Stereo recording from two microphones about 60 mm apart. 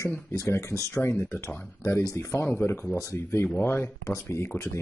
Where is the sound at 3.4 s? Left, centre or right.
Left.